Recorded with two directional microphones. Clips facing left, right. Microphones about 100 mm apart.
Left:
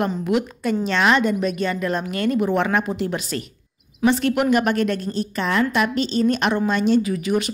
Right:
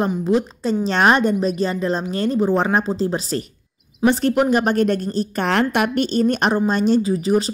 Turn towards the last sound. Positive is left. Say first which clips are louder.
# right 3 dB
turn(degrees=-30)  # may be behind; listen again after turning